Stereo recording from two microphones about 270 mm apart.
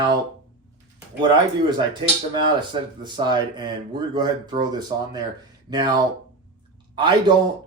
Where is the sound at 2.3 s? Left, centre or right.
Centre.